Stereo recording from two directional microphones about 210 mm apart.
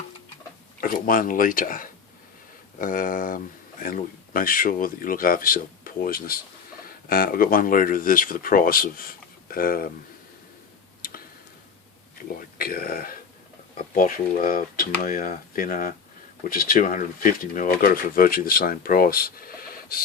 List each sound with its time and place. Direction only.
0.8 s speech: 40° left (ahead or behind)
11.0 s tick: 45° left (ahead or behind)
12.5 s speech: 45° left (ahead or behind)